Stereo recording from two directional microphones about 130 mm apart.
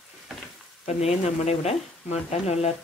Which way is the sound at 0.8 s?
55° left (ahead or behind).